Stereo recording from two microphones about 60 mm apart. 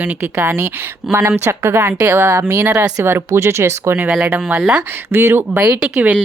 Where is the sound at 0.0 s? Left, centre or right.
Right.